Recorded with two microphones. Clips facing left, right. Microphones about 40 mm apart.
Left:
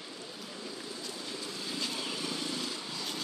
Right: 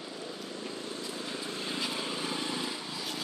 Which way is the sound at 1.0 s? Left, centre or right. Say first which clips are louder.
Right 2 dB; right.